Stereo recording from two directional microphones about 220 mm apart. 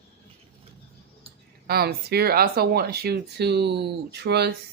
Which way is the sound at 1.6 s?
45° right (ahead or behind).